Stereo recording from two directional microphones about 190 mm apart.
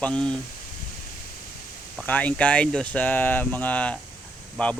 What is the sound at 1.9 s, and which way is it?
Speech, 10° left (ahead or behind).